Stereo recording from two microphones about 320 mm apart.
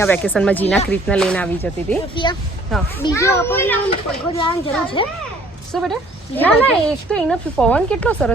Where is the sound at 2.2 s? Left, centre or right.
Centre.